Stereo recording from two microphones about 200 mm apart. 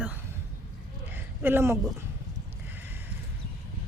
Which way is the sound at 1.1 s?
10° right (ahead or behind).